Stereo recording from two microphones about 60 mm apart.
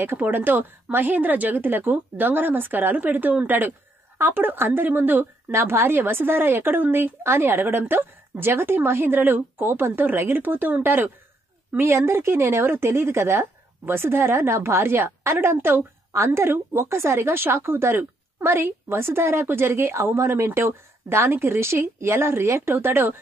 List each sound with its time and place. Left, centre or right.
0.0 s speech: right
5.5 s speech: right